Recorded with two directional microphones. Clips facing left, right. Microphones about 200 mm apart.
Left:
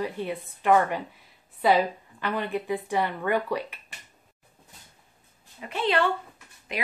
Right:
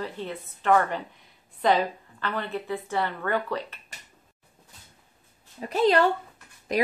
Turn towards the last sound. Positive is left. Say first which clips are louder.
# right 8 dB
turn(degrees=-40)  # may be behind; listen again after turning